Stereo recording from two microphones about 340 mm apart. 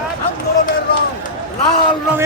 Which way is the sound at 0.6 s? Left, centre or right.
Left.